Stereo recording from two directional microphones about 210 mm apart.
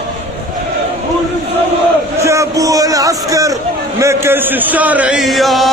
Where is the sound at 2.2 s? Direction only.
15° right (ahead or behind).